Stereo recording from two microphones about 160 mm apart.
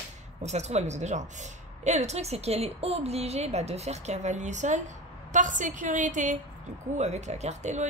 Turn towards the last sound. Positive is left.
turn(degrees=-45)  # may be behind; listen again after turning